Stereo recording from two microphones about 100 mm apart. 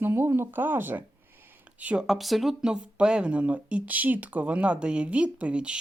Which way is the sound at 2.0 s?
Centre (ahead or behind).